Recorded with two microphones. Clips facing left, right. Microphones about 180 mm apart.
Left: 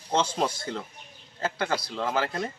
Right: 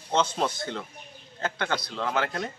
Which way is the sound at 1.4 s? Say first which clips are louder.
Left 1 dB; 5° left (ahead or behind).